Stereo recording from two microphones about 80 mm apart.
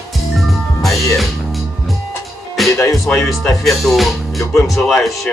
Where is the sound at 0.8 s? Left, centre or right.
Centre.